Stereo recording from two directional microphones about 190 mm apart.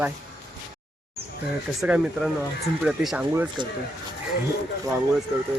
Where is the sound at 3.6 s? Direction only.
25° right (ahead or behind).